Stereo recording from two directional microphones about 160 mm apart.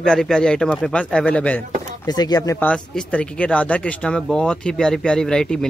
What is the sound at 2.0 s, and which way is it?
Speech, 25° left (ahead or behind).